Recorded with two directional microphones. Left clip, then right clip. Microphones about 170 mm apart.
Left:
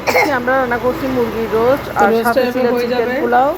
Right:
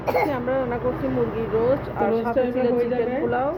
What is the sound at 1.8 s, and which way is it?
Speech, 20° left (ahead or behind).